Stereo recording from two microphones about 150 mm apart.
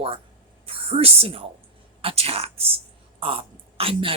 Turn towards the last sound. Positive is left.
turn(degrees=-35)  # may be behind; listen again after turning